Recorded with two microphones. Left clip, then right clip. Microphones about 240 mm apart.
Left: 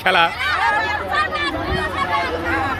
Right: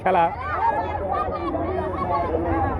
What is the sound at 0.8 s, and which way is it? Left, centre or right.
Chatter, centre.